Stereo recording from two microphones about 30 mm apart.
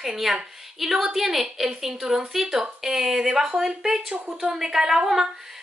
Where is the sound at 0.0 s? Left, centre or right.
Centre.